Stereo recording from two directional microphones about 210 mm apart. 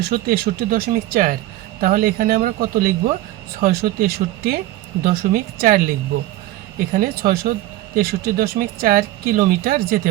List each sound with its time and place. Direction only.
0.3 s speech: 45° right (ahead or behind)